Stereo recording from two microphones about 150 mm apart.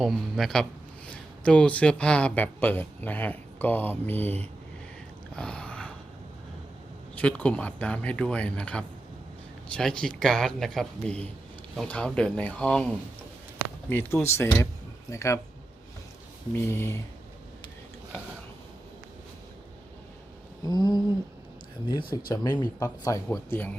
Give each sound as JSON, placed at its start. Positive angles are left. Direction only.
{"t": 0.0, "sound": "a man's voice", "side_deg": 0}
{"t": 5.3, "sound": "a sound", "side_deg": 5}
{"t": 7.2, "sound": "a man's voice", "side_deg": 10}
{"t": 13.9, "sound": "speech", "side_deg": 15}
{"t": 16.6, "sound": "speech", "side_deg": 15}
{"t": 20.7, "sound": "speech", "side_deg": 25}